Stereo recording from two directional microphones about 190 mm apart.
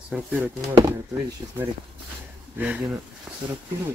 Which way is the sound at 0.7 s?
20° right (ahead or behind).